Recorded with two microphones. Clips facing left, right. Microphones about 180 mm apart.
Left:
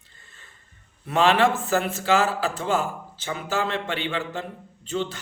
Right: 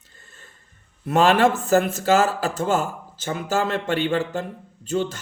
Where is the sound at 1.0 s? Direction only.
45° right (ahead or behind).